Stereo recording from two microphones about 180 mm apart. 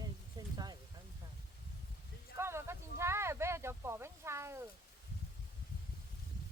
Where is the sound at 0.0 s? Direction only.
20° right (ahead or behind).